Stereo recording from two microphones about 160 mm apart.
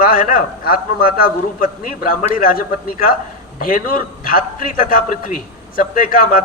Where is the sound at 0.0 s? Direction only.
60° left (ahead or behind).